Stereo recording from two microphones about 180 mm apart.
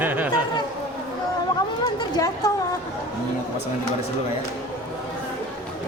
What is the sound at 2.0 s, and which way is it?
Speech, 20° left (ahead or behind).